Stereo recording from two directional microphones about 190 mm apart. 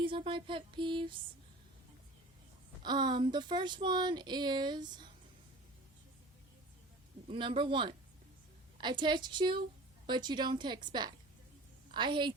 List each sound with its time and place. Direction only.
0.0 s speech: 25° right (ahead or behind)
2.8 s speech: 20° right (ahead or behind)
7.3 s speech: 25° right (ahead or behind)